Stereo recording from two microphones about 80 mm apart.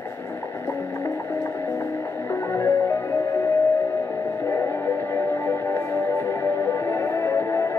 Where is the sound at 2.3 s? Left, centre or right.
Left.